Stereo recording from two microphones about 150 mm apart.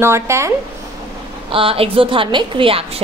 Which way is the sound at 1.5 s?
40° right (ahead or behind).